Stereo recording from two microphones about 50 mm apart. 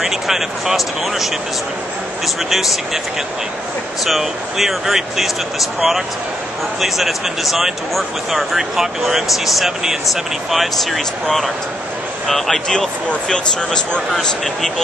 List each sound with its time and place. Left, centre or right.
0.0 s speech: centre
4.0 s speech: centre
12.6 s speech: centre
14.1 s speech: centre